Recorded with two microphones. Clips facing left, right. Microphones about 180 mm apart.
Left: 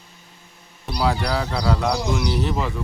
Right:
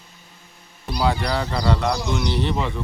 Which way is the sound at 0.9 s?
Centre (ahead or behind).